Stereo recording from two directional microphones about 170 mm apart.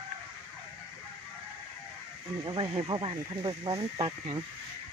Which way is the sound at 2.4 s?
30° right (ahead or behind).